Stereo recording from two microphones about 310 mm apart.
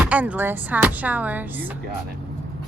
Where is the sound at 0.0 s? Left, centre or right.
Centre.